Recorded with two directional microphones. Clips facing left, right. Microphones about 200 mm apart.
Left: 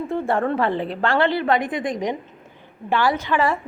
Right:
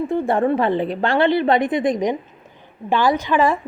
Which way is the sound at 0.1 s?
15° right (ahead or behind).